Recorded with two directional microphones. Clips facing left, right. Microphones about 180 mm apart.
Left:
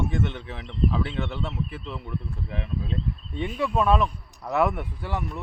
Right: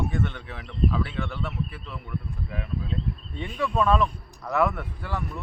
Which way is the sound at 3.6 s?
15° left (ahead or behind).